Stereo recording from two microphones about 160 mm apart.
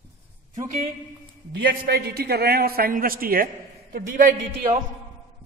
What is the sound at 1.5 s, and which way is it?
A man's voice, 75° right (ahead or behind).